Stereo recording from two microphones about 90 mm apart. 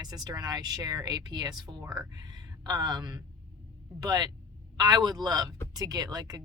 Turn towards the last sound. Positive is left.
turn(degrees=-45)  # may be behind; listen again after turning